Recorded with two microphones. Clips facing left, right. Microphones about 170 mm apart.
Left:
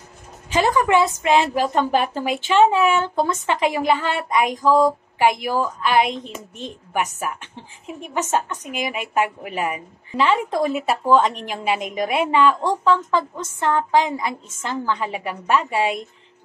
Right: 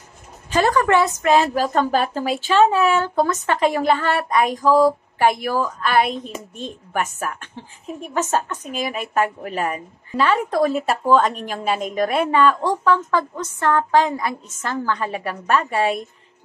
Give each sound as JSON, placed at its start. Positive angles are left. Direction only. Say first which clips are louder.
{"t": 0.5, "sound": "a woman's voice", "louder": "right 1 dB", "side_deg": 20}